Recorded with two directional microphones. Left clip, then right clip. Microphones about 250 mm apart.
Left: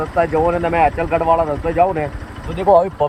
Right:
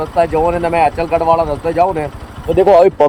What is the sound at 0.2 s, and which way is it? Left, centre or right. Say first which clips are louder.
Speech: right 3 dB; centre.